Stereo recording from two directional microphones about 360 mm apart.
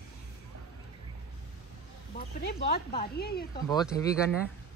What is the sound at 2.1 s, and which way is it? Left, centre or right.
Speech, left.